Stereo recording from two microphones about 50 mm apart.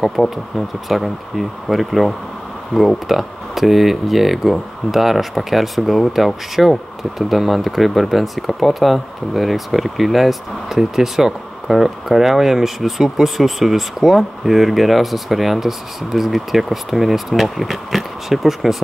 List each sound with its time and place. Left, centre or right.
0.2 s speech: centre